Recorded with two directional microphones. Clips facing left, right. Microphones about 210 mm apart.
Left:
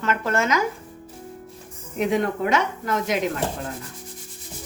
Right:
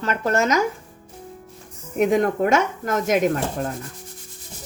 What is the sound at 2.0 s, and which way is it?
A woman's voice, 45° right (ahead or behind).